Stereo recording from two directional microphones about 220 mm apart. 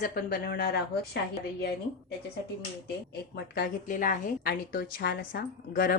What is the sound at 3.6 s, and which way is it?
A woman's voice, 40° left (ahead or behind).